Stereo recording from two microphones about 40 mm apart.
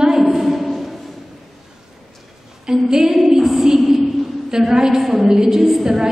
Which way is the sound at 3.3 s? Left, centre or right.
Centre.